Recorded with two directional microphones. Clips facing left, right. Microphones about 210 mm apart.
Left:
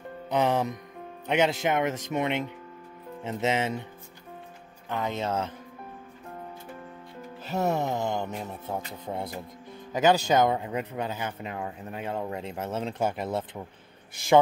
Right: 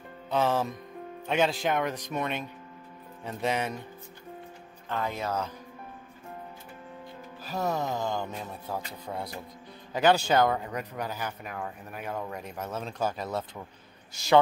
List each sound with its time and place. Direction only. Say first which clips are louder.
0.3 s speech: left 2 dB; 20° left (ahead or behind)
4.8 s speech: left 2 dB; 20° left (ahead or behind)
7.4 s speech: left 3 dB; 25° left (ahead or behind)